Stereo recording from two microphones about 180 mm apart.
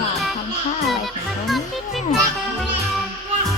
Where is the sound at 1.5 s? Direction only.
Centre (ahead or behind).